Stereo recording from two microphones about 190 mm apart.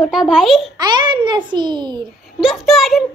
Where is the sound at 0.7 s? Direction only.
20° right (ahead or behind).